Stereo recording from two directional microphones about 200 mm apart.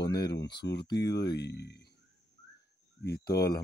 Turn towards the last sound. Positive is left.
turn(degrees=55)  # may be behind; listen again after turning